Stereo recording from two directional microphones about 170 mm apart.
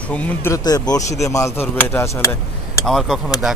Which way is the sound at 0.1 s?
10° left (ahead or behind).